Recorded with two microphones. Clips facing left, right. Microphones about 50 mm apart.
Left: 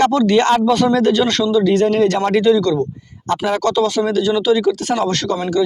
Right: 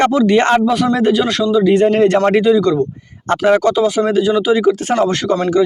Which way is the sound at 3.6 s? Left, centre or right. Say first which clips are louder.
Right 2 dB; centre.